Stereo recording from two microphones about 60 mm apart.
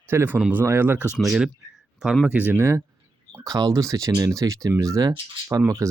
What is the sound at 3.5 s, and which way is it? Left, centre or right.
Speech, right.